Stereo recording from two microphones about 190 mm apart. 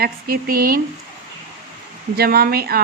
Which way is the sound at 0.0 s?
50° right (ahead or behind).